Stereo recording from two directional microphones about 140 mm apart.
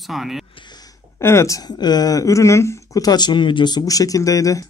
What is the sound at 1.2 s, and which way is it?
Speech, 20° left (ahead or behind).